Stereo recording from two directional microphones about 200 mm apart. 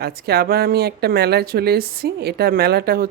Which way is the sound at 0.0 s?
50° right (ahead or behind).